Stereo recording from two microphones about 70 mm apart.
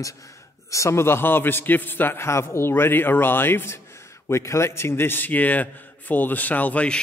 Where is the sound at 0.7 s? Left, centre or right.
Left.